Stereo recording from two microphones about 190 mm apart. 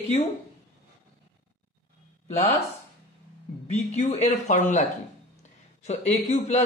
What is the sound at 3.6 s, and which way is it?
A man's voice, 35° left (ahead or behind).